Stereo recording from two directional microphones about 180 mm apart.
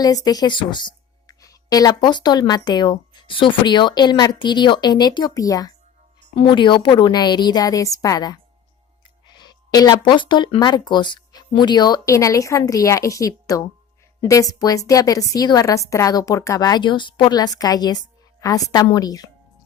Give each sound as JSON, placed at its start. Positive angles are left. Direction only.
{"t": 0.0, "sound": "a woman's voice", "side_deg": 20}